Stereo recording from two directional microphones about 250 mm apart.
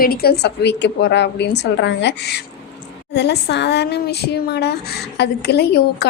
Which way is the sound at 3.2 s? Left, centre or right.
Left.